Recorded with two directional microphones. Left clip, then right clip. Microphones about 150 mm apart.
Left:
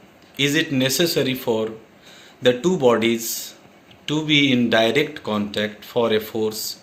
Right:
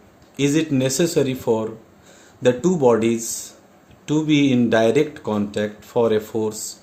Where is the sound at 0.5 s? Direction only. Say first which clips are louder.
Even; 90° right.